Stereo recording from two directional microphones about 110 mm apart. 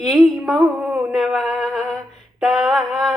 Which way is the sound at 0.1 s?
Centre (ahead or behind).